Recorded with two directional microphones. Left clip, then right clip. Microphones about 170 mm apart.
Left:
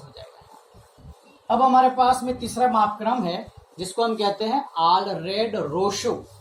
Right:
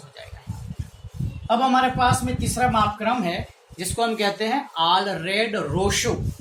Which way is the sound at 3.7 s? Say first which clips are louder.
Even; 30° right (ahead or behind).